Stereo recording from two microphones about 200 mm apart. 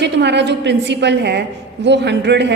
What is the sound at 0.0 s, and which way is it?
A woman's voice, 60° right (ahead or behind).